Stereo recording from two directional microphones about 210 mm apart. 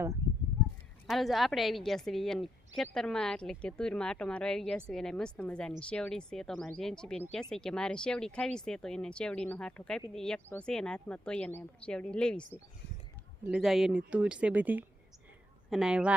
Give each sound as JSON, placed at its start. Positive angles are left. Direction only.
{"t": 1.0, "sound": "a woman's voice", "side_deg": 0}